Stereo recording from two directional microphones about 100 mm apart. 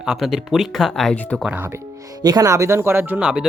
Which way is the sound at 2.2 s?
35° right (ahead or behind).